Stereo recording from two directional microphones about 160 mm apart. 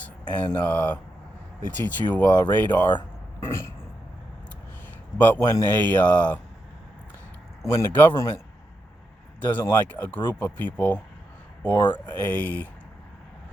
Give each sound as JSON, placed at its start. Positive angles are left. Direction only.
{"t": 0.0, "sound": "speech", "side_deg": 10}
{"t": 5.1, "sound": "speech", "side_deg": 10}
{"t": 7.6, "sound": "speech", "side_deg": 20}
{"t": 9.4, "sound": "speech", "side_deg": 10}